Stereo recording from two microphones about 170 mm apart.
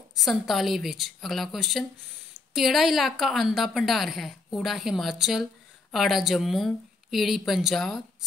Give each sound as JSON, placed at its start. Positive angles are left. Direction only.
{"t": 0.1, "sound": "a woman's voice", "side_deg": 0}